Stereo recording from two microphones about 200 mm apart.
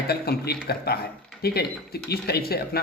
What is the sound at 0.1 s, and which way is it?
A man's voice, 50° left (ahead or behind).